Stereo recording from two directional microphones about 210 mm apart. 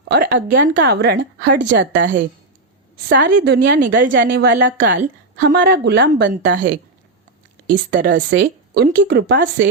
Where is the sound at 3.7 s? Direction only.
40° right (ahead or behind); by 6.6 s 60° right (ahead or behind).